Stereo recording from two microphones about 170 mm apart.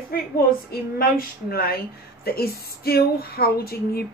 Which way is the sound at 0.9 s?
60° left (ahead or behind).